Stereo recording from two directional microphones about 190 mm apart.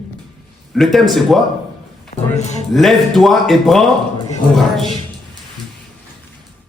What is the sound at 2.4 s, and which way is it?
Speech, 35° left (ahead or behind).